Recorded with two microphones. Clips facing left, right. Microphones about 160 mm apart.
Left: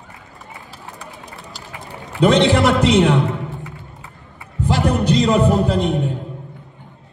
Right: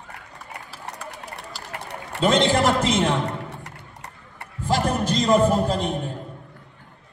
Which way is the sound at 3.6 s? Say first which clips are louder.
Left 5 dB; 75° right (ahead or behind).